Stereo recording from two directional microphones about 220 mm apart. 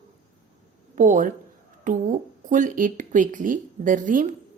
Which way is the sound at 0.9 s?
35° right (ahead or behind).